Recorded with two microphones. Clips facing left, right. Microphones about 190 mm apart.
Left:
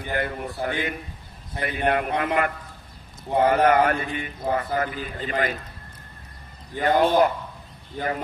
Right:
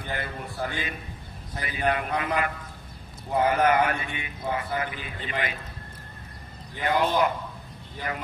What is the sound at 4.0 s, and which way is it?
Speech, 35° left (ahead or behind).